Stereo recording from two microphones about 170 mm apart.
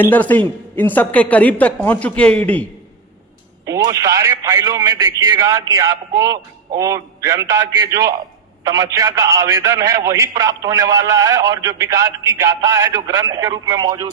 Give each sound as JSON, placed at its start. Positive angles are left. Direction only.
{"t": 0.0, "sound": "a woman's voice", "side_deg": 10}
{"t": 3.7, "sound": "a man's voice", "side_deg": -20}